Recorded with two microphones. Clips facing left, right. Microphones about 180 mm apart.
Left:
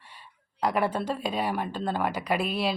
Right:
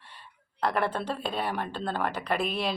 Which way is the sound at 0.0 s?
10° left (ahead or behind).